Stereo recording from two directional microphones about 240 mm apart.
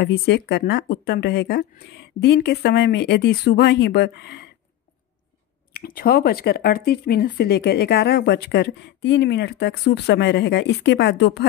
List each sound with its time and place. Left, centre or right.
0.0 s speech: left
5.7 s speech: left